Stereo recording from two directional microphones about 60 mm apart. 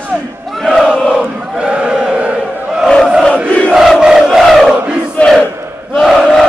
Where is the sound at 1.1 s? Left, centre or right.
Centre.